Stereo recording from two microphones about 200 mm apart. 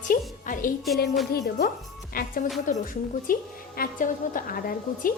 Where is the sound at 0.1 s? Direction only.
45° left (ahead or behind).